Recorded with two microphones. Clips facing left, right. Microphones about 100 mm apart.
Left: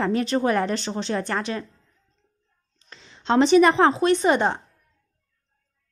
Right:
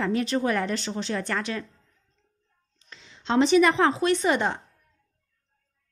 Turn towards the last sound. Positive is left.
turn(degrees=35)  # may be behind; listen again after turning